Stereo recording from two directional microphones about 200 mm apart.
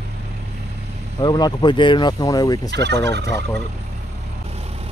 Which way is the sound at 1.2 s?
20° left (ahead or behind).